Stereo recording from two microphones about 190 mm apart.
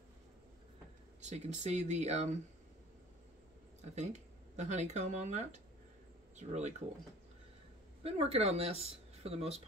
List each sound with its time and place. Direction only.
1.2 s speech: 35° right (ahead or behind)
3.8 s speech: 35° right (ahead or behind)
8.0 s speech: 30° right (ahead or behind)